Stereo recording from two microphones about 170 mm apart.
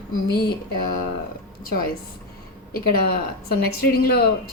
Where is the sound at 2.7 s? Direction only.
65° left (ahead or behind).